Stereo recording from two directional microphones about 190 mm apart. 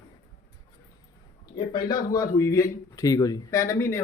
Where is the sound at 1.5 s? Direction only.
20° left (ahead or behind).